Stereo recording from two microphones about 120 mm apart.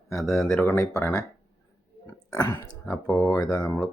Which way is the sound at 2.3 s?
25° left (ahead or behind).